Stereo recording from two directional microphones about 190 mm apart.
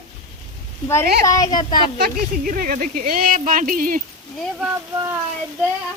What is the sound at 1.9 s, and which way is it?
Speech, 50° right (ahead or behind).